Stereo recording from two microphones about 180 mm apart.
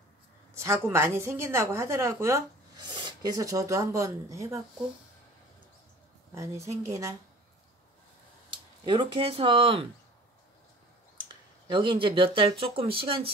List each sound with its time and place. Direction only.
0.6 s a woman's voice: 15° right (ahead or behind)
6.3 s a woman's voice: 15° right (ahead or behind)
8.8 s speech: 25° right (ahead or behind)
11.1 s speech: 25° right (ahead or behind)